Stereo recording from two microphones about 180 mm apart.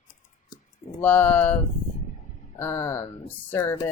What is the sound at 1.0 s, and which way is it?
Speech, 10° left (ahead or behind).